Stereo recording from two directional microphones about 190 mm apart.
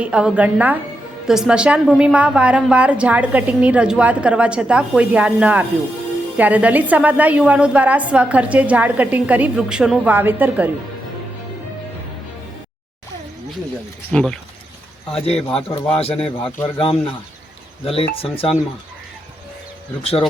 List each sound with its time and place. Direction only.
0.0 s a woman's voice: 5° right (ahead or behind)
14.1 s a woman's voice: 5° left (ahead or behind)
15.2 s speech: 30° left (ahead or behind)
15.4 s a woman's voice: 5° left (ahead or behind)
16.0 s speech: 30° left (ahead or behind)
20.0 s speech: 30° left (ahead or behind)